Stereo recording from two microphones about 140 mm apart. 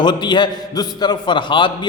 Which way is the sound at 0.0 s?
30° left (ahead or behind).